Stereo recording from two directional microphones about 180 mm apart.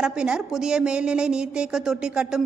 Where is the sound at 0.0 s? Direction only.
5° right (ahead or behind).